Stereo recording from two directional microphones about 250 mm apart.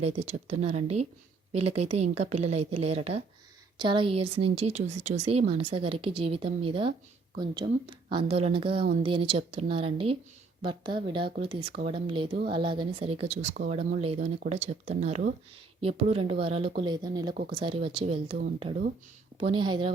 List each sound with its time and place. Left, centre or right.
0.0 s speech: right